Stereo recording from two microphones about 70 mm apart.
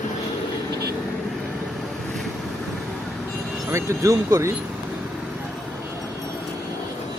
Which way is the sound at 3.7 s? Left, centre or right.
Right.